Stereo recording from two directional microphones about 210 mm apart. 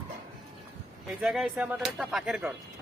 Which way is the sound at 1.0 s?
5° right (ahead or behind).